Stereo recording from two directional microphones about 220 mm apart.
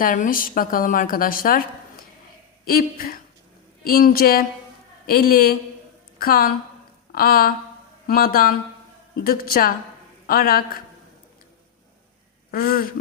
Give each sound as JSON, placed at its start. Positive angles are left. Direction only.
{"t": 0.0, "sound": "a woman's voice", "side_deg": 40}
{"t": 2.6, "sound": "a woman's voice", "side_deg": 40}
{"t": 12.5, "sound": "a sound", "side_deg": 40}